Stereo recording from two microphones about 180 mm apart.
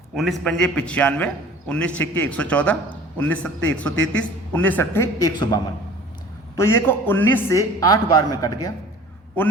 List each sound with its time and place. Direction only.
0.2 s a man's voice: centre (ahead or behind)
6.6 s a man's voice: 15° left (ahead or behind)